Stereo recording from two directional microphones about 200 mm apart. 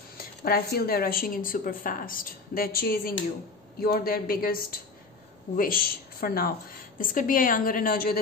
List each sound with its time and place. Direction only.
0.2 s a woman's voice: 50° left (ahead or behind)